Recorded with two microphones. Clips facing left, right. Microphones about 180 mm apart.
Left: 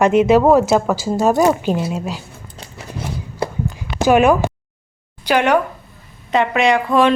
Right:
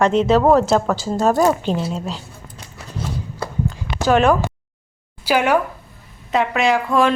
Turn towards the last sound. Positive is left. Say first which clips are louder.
# left 2 dB
turn(degrees=0)  # may be behind; listen again after turning